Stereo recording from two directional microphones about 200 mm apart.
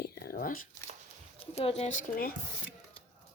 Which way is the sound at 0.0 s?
50° left (ahead or behind).